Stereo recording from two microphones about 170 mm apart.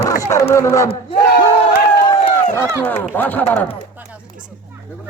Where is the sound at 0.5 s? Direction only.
15° left (ahead or behind).